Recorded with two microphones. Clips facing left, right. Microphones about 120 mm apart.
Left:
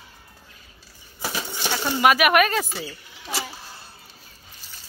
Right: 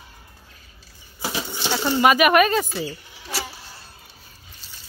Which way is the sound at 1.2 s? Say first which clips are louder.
Right 2 dB; 20° right (ahead or behind).